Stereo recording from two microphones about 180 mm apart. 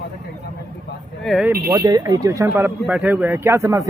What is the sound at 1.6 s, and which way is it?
Speech, 20° right (ahead or behind).